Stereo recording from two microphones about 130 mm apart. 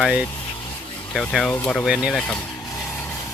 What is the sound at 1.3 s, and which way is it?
Speech, 5° left (ahead or behind).